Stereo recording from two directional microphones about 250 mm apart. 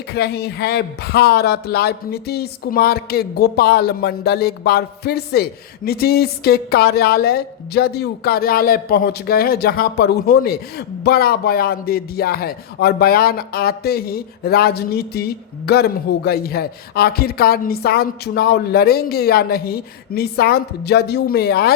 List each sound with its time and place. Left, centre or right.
0.1 s speech: left